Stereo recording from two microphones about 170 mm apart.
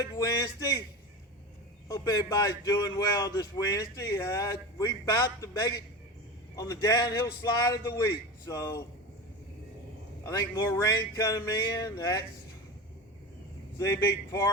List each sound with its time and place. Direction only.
0.0 s a man's voice: 20° left (ahead or behind)
1.9 s speech: 20° left (ahead or behind)
10.2 s speech: 20° left (ahead or behind)
13.7 s speech: 15° left (ahead or behind)